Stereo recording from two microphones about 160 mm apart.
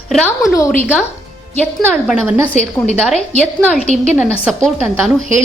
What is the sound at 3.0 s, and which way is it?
A woman's voice, 5° left (ahead or behind).